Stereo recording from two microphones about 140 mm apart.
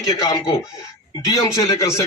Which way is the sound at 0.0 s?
30° left (ahead or behind).